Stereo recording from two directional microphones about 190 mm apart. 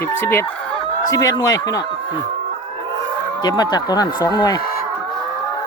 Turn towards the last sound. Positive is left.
turn(degrees=20)  # may be behind; listen again after turning